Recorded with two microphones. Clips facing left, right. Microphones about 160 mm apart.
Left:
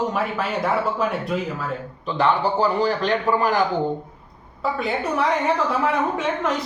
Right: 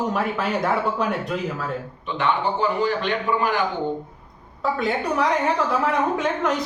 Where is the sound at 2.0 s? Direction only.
35° left (ahead or behind).